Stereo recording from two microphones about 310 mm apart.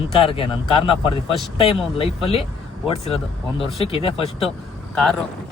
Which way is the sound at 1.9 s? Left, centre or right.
Centre.